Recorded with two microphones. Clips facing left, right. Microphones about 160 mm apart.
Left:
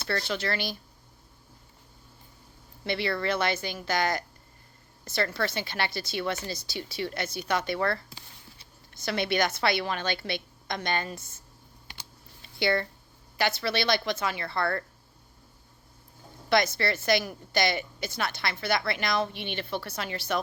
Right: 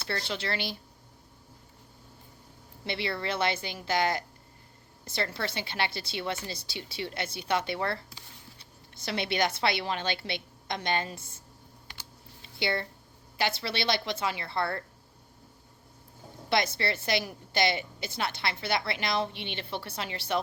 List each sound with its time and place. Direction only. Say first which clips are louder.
0.1 s a woman's voice: left 3 dB; 25° right (ahead or behind)
2.8 s a woman's voice: left 4 dB; 25° right (ahead or behind)
9.0 s a woman's voice: left 2 dB; 30° right (ahead or behind)
12.4 s a sound: left 4 dB; 25° right (ahead or behind)
13.4 s a woman's voice: left 3 dB; 25° right (ahead or behind)
16.6 s a woman's voice: left 3 dB; 30° right (ahead or behind)